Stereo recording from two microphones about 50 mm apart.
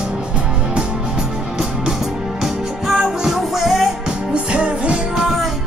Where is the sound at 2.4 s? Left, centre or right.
Centre.